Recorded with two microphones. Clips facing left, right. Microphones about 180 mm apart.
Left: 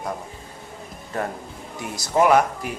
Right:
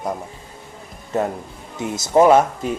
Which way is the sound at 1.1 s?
20° right (ahead or behind).